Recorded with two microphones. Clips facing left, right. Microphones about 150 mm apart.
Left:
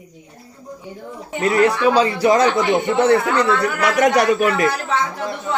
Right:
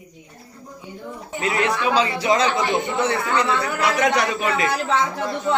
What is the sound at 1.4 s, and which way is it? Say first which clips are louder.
A man's voice: left 6 dB; 40° left (ahead or behind).